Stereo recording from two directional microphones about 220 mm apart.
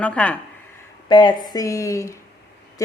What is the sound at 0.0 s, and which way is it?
Speech, 5° left (ahead or behind).